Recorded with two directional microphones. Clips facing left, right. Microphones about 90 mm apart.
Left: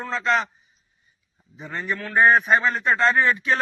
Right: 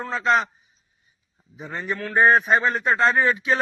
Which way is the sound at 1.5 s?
5° right (ahead or behind).